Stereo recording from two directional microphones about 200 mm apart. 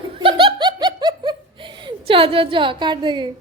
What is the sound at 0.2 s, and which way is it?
Laughter, 25° right (ahead or behind).